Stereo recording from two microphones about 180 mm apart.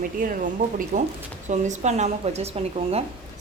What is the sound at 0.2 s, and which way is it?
A woman's voice, 50° right (ahead or behind).